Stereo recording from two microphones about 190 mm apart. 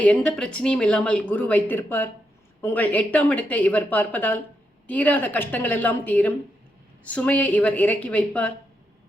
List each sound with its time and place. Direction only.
0.0 s speech: 5° left (ahead or behind)